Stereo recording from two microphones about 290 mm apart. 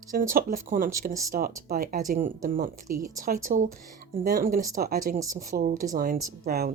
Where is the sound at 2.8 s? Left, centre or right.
Right.